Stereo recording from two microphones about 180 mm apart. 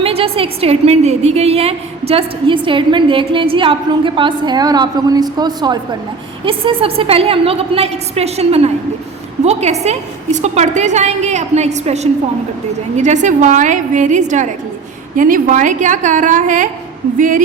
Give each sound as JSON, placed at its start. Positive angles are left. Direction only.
{"t": 0.0, "sound": "a woman's voice", "side_deg": -30}
{"t": 13.2, "sound": "a woman's voice", "side_deg": -45}